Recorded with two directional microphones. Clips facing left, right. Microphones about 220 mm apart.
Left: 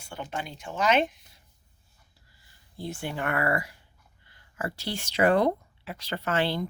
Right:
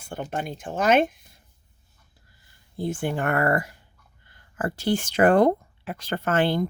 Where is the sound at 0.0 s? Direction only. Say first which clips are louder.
Right 5 dB; 50° right (ahead or behind).